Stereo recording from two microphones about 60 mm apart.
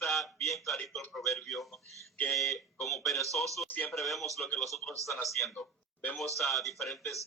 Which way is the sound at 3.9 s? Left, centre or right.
Centre.